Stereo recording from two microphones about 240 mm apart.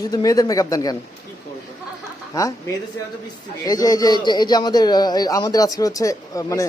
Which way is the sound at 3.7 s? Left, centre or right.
Centre.